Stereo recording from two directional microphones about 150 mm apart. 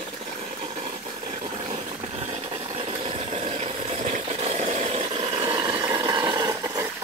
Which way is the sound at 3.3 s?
45° right (ahead or behind).